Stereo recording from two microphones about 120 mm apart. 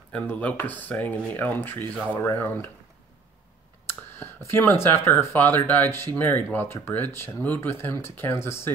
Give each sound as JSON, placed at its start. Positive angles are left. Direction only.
{"t": 0.1, "sound": "speech", "side_deg": 10}
{"t": 3.8, "sound": "speech", "side_deg": 20}